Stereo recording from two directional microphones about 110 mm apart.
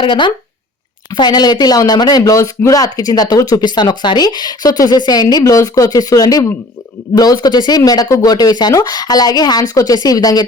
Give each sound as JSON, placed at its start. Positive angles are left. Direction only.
{"t": 0.0, "sound": "speech", "side_deg": 45}